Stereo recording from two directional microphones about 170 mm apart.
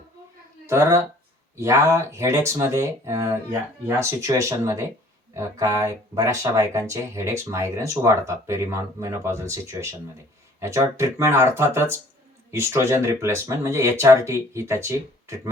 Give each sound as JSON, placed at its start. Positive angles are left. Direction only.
{"t": 0.7, "sound": "speech", "side_deg": -15}